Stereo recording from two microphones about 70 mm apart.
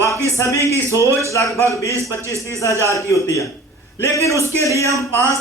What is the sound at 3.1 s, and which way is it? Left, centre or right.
Speech, left.